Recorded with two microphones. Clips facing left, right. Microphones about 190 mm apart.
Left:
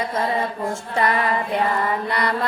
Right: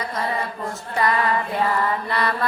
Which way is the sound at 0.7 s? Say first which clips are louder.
Right 1 dB; 25° left (ahead or behind).